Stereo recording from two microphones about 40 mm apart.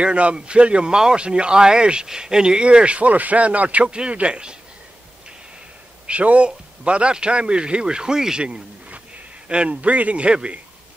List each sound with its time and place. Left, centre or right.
0.0 s speech: right
0.9 s speech: centre
1.2 s speech: right
3.8 s speech: right
6.0 s speech: right; by 8.5 s centre
9.7 s a man's voice: right